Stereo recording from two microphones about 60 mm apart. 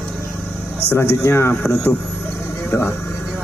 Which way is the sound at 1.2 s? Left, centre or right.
Left.